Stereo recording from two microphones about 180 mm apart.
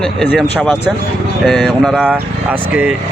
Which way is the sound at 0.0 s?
Centre (ahead or behind).